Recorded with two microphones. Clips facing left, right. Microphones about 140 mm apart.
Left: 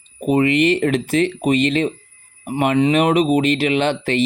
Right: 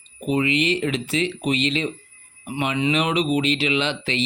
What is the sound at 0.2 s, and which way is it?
Speech, 50° left (ahead or behind).